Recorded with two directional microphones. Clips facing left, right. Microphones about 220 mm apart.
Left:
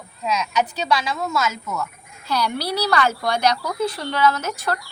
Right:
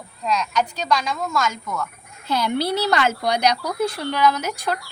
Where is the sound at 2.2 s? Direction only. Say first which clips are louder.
Right 2 dB; 20° right (ahead or behind).